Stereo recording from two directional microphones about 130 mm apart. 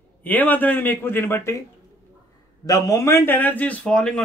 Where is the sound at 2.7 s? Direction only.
25° left (ahead or behind); by 4.2 s 5° left (ahead or behind).